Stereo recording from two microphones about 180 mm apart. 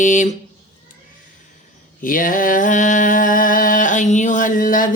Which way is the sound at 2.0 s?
50° left (ahead or behind).